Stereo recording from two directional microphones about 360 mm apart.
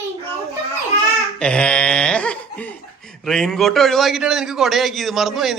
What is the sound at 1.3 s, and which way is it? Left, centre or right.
Laughter, centre.